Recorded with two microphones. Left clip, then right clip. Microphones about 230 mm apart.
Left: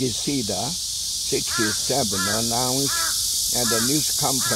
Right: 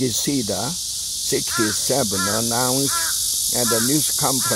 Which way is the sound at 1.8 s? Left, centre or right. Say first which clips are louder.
Right 2 dB; right.